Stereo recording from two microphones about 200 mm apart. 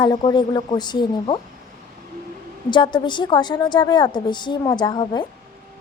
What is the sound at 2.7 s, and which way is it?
Speech, 25° left (ahead or behind).